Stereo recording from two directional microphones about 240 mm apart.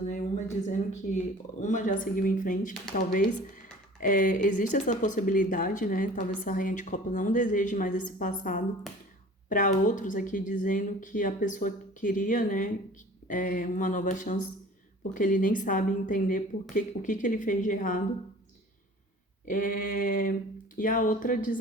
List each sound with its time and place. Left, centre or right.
0.1 s speech: left
19.5 s speech: left